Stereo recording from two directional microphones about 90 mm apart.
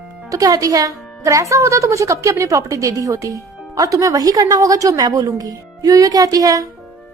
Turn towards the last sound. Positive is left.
turn(degrees=-40)  # may be behind; listen again after turning